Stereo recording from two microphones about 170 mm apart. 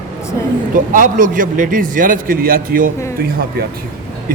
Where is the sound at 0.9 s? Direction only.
50° right (ahead or behind).